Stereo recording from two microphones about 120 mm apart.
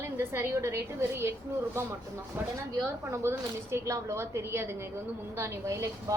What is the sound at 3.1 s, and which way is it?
A woman's voice, 20° right (ahead or behind).